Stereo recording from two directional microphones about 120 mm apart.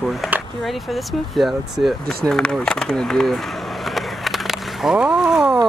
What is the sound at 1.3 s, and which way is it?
Speech, centre (ahead or behind).